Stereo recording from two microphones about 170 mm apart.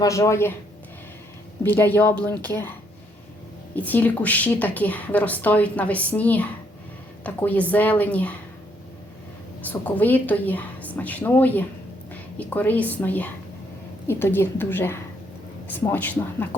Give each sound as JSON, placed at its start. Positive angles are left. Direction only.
{"t": 0.0, "sound": "a woman's voice", "side_deg": 20}
{"t": 1.6, "sound": "a woman's voice", "side_deg": 10}
{"t": 3.8, "sound": "a woman's voice", "side_deg": 10}
{"t": 9.6, "sound": "a woman's voice", "side_deg": 10}